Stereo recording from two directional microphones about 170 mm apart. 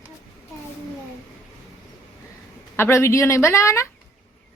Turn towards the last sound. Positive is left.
turn(degrees=15)  # may be behind; listen again after turning